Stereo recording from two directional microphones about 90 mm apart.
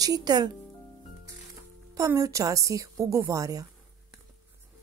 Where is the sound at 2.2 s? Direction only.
40° right (ahead or behind).